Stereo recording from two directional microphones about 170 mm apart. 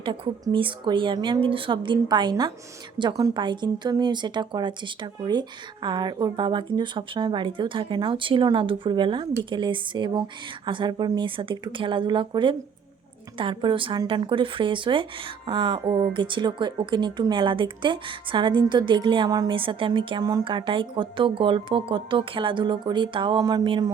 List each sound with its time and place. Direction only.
0.0 s speech: 30° right (ahead or behind)